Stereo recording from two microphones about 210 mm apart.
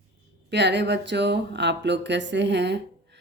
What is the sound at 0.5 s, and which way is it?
Speech, 55° right (ahead or behind).